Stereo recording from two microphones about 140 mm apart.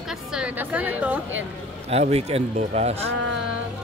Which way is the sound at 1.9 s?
50° right (ahead or behind).